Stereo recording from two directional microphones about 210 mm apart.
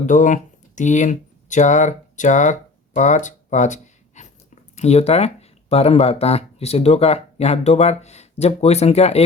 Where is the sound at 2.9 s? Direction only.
35° left (ahead or behind).